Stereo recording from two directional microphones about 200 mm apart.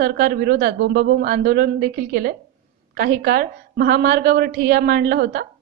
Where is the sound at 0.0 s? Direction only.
50° right (ahead or behind).